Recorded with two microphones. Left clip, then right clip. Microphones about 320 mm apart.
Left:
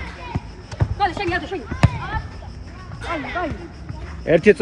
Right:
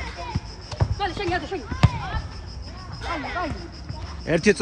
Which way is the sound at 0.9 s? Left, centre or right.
Centre.